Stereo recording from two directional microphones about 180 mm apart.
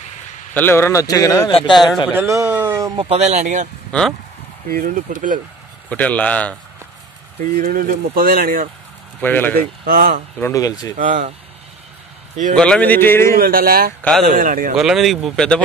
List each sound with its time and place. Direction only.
0.6 s speech: 10° left (ahead or behind)
2.0 s speech: 15° right (ahead or behind)
3.0 s speech: 35° right (ahead or behind)
3.9 s speech: 5° left (ahead or behind)
4.6 s speech: 50° right (ahead or behind)
5.9 s speech: 10° left (ahead or behind)
7.5 s speech: 55° right (ahead or behind)
9.2 s speech: 10° left (ahead or behind)
9.6 s speech: 55° right (ahead or behind)
10.4 s speech: 20° left (ahead or behind)
11.0 s speech: 45° right (ahead or behind)
12.5 s speech: 5° left (ahead or behind)
13.4 s speech: 55° right (ahead or behind)
14.8 s speech: centre (ahead or behind)